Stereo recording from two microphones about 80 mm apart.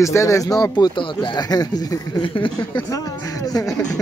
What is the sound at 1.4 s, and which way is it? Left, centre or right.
Speech, left.